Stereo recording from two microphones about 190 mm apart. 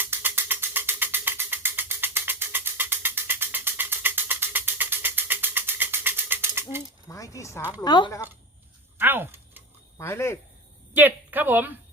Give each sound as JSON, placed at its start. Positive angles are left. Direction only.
{"t": 0.0, "sound": "music", "side_deg": -10}
{"t": 7.1, "sound": "speech", "side_deg": 15}
{"t": 9.0, "sound": "a sound", "side_deg": -10}
{"t": 10.0, "sound": "speech", "side_deg": 15}
{"t": 10.9, "sound": "a woman's voice", "side_deg": -10}